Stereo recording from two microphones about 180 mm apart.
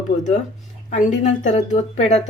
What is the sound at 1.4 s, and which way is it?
Speech, 40° left (ahead or behind).